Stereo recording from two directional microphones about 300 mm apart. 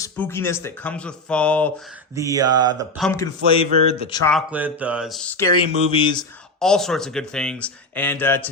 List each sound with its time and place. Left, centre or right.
0.0 s speech: centre
2.1 s mantra: centre
3.0 s speech: centre
4.3 s speech: centre
5.9 s speech: centre
6.6 s speech: centre